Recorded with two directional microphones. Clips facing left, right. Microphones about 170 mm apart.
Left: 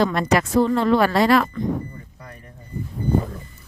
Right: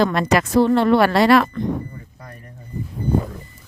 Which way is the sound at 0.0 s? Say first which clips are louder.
Right 2 dB; 90° right.